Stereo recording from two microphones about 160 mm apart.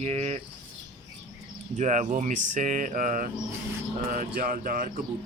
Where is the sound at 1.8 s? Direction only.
50° right (ahead or behind).